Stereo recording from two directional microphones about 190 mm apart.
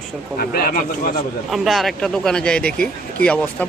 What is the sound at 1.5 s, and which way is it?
Speech, centre (ahead or behind).